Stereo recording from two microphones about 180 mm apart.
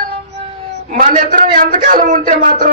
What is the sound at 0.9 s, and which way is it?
A man's voice, 50° right (ahead or behind).